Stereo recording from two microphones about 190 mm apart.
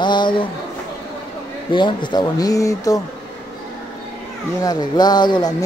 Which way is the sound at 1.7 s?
25° left (ahead or behind).